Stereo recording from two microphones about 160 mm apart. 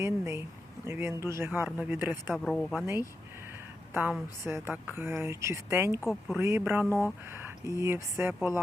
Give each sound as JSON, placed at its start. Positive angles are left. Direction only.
{"t": 0.0, "sound": "speech", "side_deg": -20}
{"t": 2.3, "sound": "speech", "side_deg": 5}
{"t": 4.4, "sound": "speech", "side_deg": -15}
{"t": 6.1, "sound": "speech", "side_deg": 0}
{"t": 6.4, "sound": "speech", "side_deg": -15}